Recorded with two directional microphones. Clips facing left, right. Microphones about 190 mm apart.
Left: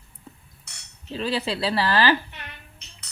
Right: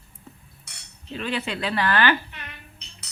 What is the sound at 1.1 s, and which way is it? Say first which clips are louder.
Speech: left 2 dB; 35° left (ahead or behind).